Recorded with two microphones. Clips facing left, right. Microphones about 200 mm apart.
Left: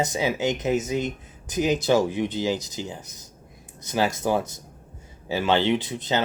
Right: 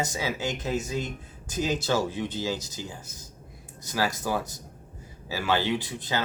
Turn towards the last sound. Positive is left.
turn(degrees=20)  # may be behind; listen again after turning